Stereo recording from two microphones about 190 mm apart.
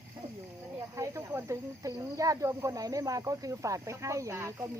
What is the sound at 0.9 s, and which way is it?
Speech, 15° right (ahead or behind).